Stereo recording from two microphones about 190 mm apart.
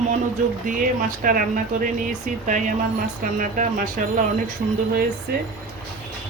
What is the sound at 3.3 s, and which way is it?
Speech, 45° right (ahead or behind).